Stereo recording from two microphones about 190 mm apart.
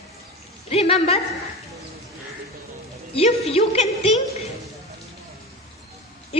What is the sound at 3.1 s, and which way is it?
Speech, 30° left (ahead or behind).